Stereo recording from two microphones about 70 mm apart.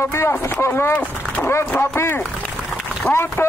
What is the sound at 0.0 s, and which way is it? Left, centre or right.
Speech, left.